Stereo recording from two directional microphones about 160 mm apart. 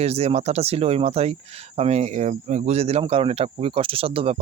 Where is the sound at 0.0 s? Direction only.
40° right (ahead or behind).